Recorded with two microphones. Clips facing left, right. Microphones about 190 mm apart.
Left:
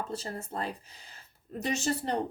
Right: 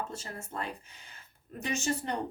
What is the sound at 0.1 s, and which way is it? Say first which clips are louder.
Speech: left 5 dB; 35° left (ahead or behind).